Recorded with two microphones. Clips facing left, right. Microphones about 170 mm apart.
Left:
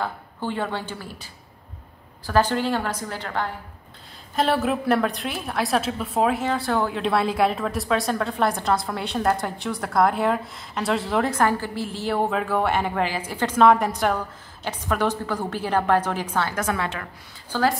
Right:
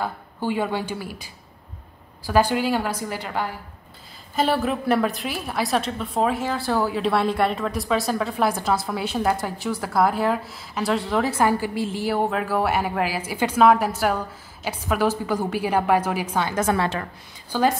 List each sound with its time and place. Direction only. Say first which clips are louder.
0.0 s a woman's voice: right 2 dB; 10° right (ahead or behind)
12.2 s a woman's voice: left 1 dB; centre (ahead or behind)
16.5 s a woman's voice: right 4 dB; 30° right (ahead or behind)
17.5 s a woman's voice: right 1 dB; 15° right (ahead or behind)